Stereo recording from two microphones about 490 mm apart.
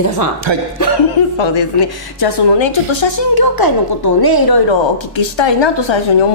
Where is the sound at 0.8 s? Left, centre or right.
Left.